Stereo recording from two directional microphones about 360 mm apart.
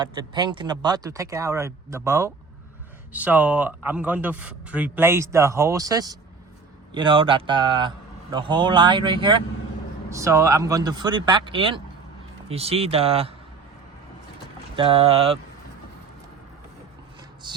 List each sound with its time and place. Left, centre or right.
0.0 s a man's voice: centre
14.8 s speech: centre